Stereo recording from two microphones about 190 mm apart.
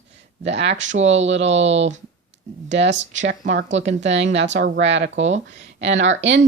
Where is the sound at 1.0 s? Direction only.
75° right (ahead or behind).